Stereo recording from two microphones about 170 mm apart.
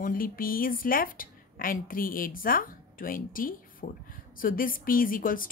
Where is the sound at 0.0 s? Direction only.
55° left (ahead or behind).